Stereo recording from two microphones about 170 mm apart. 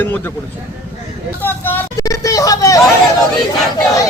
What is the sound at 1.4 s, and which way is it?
Vehicle, 10° left (ahead or behind).